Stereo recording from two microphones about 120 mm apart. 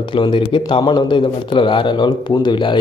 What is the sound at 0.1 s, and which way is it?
A man's voice, 45° left (ahead or behind).